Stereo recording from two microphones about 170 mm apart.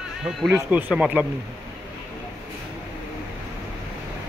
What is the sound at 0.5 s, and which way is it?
Speech, 5° right (ahead or behind).